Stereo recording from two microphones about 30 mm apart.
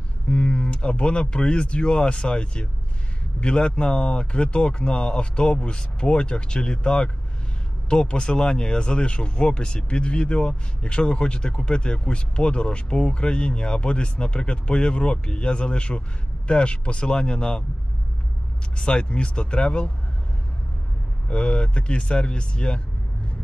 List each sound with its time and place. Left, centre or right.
0.3 s speech: left
18.8 s speech: left
21.3 s speech: left